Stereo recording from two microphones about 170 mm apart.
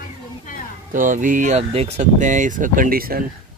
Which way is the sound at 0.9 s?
50° right (ahead or behind).